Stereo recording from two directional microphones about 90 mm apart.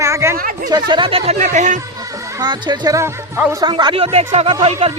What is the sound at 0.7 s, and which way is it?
Speech, 60° right (ahead or behind).